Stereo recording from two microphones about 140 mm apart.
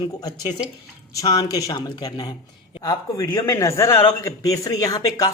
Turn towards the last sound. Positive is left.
turn(degrees=25)  # may be behind; listen again after turning